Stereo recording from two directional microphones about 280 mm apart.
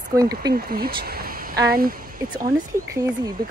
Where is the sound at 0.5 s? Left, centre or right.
Right.